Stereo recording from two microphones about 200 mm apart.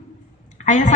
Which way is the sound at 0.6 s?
40° left (ahead or behind).